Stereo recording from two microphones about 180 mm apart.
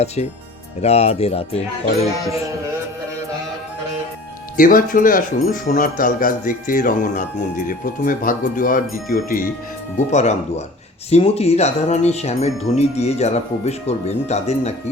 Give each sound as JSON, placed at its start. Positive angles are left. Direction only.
{"t": 0.8, "sound": "speech", "side_deg": 35}
{"t": 4.5, "sound": "speech", "side_deg": 50}